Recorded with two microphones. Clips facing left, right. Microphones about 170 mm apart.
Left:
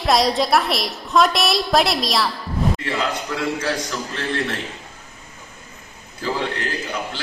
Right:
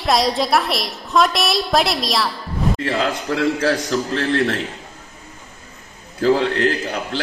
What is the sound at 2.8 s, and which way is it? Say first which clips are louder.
A man's voice: right 3 dB; 40° right (ahead or behind).